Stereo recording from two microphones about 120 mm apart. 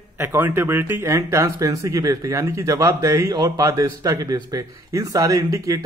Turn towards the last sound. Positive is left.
turn(degrees=-25)  # may be behind; listen again after turning